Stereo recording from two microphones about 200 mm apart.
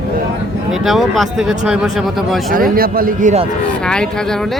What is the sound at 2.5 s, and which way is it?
Speech, 45° right (ahead or behind).